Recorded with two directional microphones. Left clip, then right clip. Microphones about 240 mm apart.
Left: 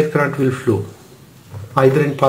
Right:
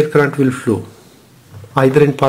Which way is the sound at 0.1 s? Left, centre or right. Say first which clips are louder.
Right 4 dB; right.